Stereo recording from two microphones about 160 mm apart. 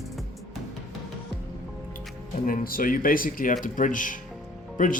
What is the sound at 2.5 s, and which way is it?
Speech, 65° left (ahead or behind).